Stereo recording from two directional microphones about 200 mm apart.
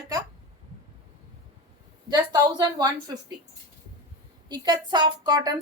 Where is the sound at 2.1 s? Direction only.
20° right (ahead or behind).